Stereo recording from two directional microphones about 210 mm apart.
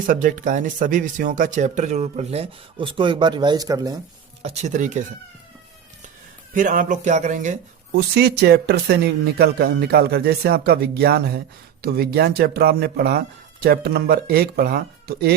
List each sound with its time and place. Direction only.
0.0 s speech: 40° right (ahead or behind); by 4.0 s 15° right (ahead or behind)
4.4 s speech: 30° right (ahead or behind)
6.5 s speech: 40° right (ahead or behind)
7.9 s speech: 50° right (ahead or behind)